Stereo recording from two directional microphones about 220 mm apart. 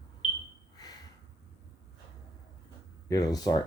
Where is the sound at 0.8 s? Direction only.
15° left (ahead or behind).